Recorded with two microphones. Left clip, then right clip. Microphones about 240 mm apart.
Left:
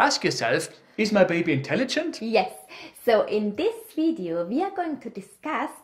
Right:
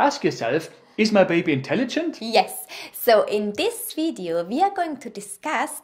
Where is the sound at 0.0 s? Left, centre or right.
Left.